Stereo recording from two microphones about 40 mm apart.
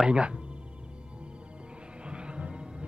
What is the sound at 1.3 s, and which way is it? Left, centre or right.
Music, right.